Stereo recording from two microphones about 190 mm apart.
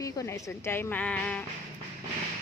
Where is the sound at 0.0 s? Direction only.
15° left (ahead or behind).